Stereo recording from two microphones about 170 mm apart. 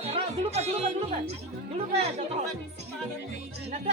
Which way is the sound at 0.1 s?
35° right (ahead or behind).